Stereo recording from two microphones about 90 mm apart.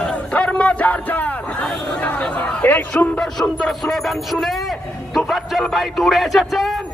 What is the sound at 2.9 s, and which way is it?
Speech, 10° left (ahead or behind).